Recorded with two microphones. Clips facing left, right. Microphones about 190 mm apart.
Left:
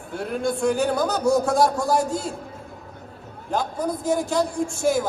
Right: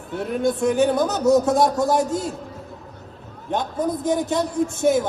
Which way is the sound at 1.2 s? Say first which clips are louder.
Right 4 dB; 20° right (ahead or behind).